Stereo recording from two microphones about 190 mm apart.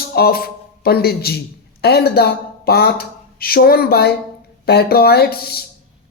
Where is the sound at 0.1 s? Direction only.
55° left (ahead or behind).